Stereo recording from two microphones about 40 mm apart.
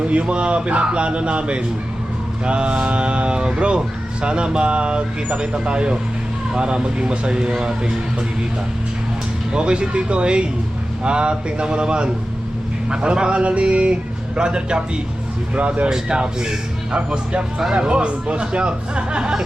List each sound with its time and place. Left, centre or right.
0.1 s speech: right
9.5 s speech: right
15.5 s speech: right
15.9 s speech: right